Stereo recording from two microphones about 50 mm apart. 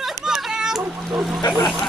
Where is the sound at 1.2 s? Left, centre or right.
Centre.